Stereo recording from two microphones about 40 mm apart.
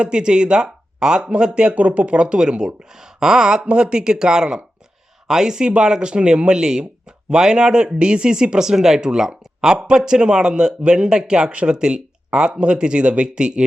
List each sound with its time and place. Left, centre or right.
0.0 s speech: right